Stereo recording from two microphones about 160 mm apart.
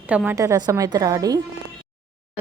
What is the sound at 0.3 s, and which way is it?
A woman's voice, 20° right (ahead or behind).